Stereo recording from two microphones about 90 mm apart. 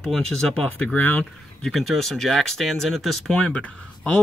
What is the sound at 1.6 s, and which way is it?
Speech, centre (ahead or behind).